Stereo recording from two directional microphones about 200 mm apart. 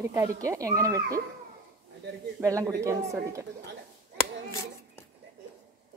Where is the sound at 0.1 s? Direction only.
15° right (ahead or behind).